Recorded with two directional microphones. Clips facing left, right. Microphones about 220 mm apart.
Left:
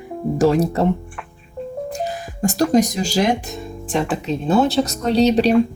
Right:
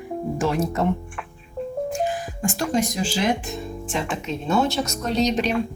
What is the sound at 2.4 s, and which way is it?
Speech, 40° left (ahead or behind).